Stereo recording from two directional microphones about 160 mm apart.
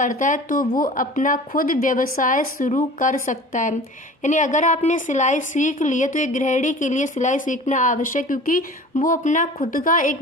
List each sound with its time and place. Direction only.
0.0 s a woman's voice: 55° left (ahead or behind)